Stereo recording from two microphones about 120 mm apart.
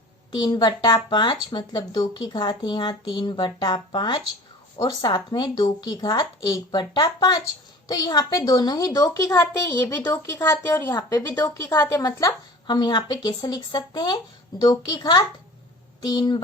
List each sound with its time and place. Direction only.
0.3 s a woman's voice: 40° left (ahead or behind); by 10.9 s 20° left (ahead or behind)
10.9 s a woman's voice: 35° left (ahead or behind)
11.3 s speech: 20° left (ahead or behind)
12.6 s a woman's voice: 35° left (ahead or behind)